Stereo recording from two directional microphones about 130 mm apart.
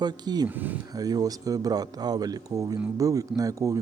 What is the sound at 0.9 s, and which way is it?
Speech, 30° right (ahead or behind).